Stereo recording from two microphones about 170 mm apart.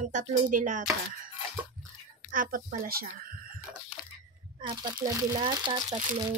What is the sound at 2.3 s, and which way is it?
Speech, 55° right (ahead or behind).